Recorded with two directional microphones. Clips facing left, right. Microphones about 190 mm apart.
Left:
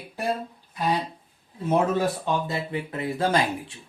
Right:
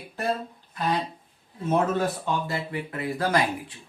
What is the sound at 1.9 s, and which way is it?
Speech, 20° left (ahead or behind).